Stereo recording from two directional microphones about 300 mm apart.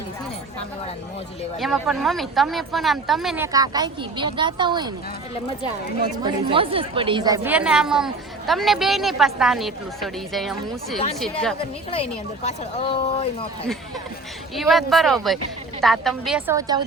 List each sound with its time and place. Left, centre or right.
1.5 s a woman's voice: centre
6.2 s a woman's voice: centre
12.5 s speech: centre
14.5 s a woman's voice: centre